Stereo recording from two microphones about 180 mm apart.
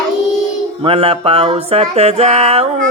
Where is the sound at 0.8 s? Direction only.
30° right (ahead or behind).